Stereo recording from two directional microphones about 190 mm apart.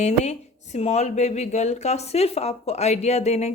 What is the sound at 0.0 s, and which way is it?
Speech, 35° left (ahead or behind).